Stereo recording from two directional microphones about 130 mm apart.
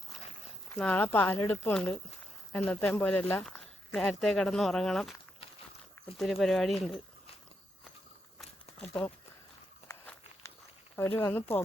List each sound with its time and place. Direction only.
0.8 s speech: 10° left (ahead or behind)
1.7 s speech: 5° left (ahead or behind)
6.1 s speech: centre (ahead or behind)
8.8 s speech: 10° left (ahead or behind)
11.2 s speech: 15° left (ahead or behind)